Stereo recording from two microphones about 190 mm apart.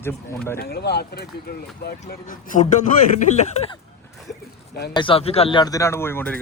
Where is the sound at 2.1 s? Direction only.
45° left (ahead or behind).